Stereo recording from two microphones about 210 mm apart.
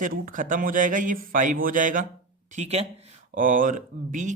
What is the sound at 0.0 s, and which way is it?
Speech, 40° right (ahead or behind).